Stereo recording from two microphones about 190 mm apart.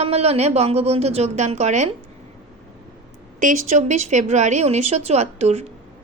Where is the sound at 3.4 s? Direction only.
40° right (ahead or behind).